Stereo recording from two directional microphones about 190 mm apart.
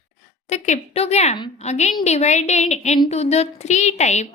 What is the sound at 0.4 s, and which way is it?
A woman's voice, 35° left (ahead or behind).